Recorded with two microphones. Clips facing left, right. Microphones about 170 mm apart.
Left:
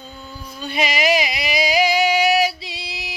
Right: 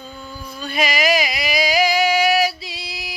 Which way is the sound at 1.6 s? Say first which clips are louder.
Even; 25° left (ahead or behind).